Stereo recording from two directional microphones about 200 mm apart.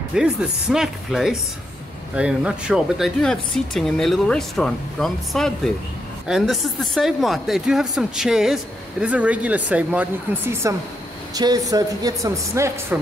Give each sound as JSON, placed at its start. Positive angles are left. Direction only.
{"t": 0.1, "sound": "speech", "side_deg": -5}